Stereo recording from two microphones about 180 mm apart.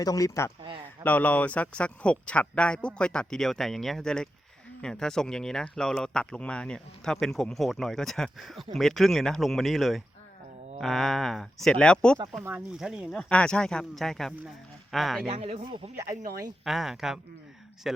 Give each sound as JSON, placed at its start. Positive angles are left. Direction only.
{"t": 0.0, "sound": "speech", "side_deg": 20}
{"t": 12.4, "sound": "speech", "side_deg": -10}
{"t": 15.3, "sound": "speech", "side_deg": -35}
{"t": 16.1, "sound": "speech", "side_deg": -20}
{"t": 16.6, "sound": "speech", "side_deg": 0}